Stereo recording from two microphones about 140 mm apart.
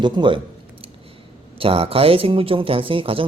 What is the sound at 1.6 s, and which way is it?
Speech, 40° right (ahead or behind).